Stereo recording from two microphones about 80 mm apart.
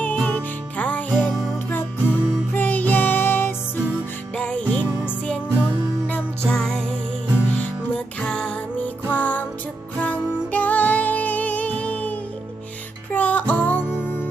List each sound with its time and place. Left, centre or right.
0.0 s music: centre
4.4 s music: centre
6.5 s music: centre; by 14.3 s left